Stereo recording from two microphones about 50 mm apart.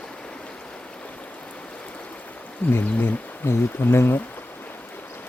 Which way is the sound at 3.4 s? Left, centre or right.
Left.